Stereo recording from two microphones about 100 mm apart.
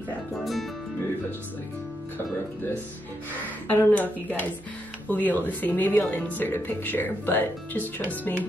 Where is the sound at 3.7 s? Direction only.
20° left (ahead or behind).